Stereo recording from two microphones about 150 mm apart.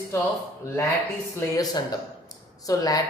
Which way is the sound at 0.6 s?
20° left (ahead or behind).